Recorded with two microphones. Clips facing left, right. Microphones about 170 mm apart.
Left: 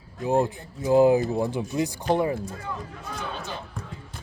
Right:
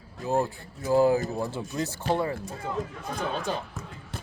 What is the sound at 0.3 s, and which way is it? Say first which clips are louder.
Speech: left 3 dB; 20° left (ahead or behind).